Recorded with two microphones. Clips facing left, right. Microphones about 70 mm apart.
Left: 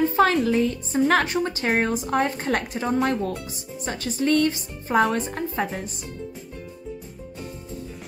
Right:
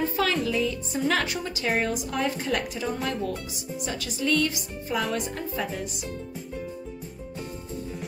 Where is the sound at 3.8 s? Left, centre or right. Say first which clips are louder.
Left 5 dB; left.